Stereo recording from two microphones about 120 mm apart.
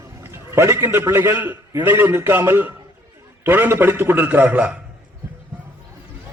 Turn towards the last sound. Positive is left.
turn(degrees=-10)  # may be behind; listen again after turning